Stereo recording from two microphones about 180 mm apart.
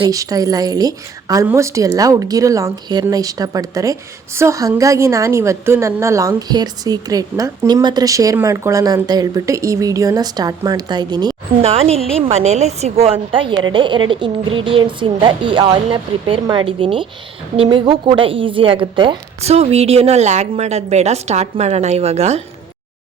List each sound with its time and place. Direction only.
0.0 s a woman's voice: 20° right (ahead or behind)
11.6 s a woman's voice: 35° right (ahead or behind)